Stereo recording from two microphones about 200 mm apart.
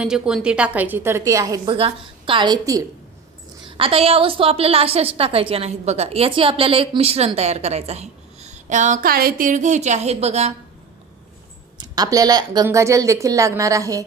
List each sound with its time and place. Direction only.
0.0 s a woman's voice: 5° right (ahead or behind); by 10.5 s 30° right (ahead or behind)
11.8 s a woman's voice: 20° right (ahead or behind)